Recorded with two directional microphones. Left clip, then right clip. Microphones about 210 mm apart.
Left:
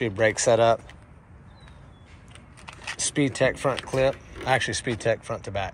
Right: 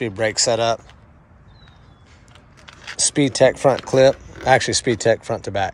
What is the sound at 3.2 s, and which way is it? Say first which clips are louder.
Speech: right 8 dB; 25° right (ahead or behind).